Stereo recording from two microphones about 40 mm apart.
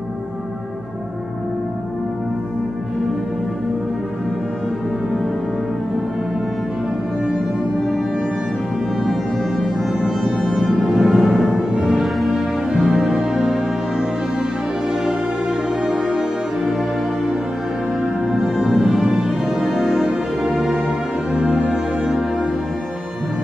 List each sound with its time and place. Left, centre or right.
9.0 s music: centre
10.0 s music: centre
12.6 s music: centre
18.0 s music: centre
18.4 s music: centre